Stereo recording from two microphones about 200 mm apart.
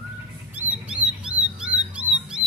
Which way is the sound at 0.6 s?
5° right (ahead or behind).